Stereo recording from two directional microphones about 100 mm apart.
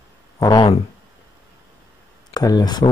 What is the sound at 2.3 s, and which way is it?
Speech, 40° left (ahead or behind).